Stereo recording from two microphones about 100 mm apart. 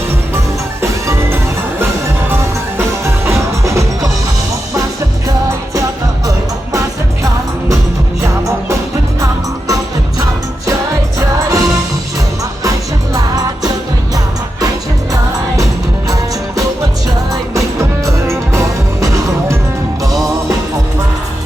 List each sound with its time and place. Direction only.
0.8 s music: 25° right (ahead or behind)
2.4 s music: 30° right (ahead or behind)
8.2 s music: 30° right (ahead or behind)
17.5 s music: 30° right (ahead or behind)